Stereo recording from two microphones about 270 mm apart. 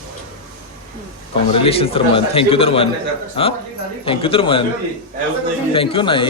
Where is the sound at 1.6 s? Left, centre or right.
Left.